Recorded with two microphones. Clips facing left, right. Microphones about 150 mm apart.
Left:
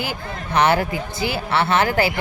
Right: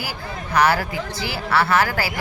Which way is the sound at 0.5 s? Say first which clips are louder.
Left 1 dB; 25° left (ahead or behind).